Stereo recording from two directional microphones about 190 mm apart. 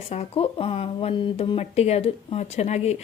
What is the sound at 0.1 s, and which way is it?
A woman's voice, 30° left (ahead or behind).